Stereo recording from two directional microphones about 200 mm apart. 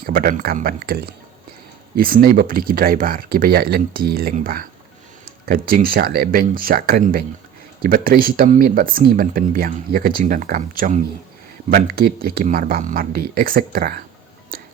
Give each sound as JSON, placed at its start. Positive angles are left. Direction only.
{"t": 0.0, "sound": "speech", "side_deg": -45}
{"t": 14.5, "sound": "music", "side_deg": -45}